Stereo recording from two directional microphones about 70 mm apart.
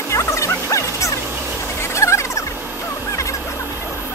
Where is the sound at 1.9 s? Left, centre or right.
Left.